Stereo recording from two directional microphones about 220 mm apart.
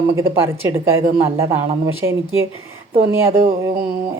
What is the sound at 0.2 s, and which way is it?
Speech, 10° right (ahead or behind).